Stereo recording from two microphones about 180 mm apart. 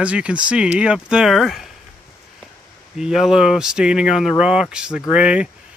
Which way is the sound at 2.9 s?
Centre (ahead or behind).